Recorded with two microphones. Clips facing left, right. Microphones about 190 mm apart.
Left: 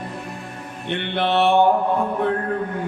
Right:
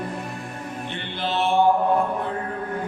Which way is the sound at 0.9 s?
65° left (ahead or behind).